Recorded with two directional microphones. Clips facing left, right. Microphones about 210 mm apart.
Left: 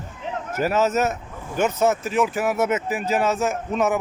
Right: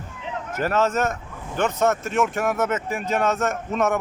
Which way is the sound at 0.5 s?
10° left (ahead or behind).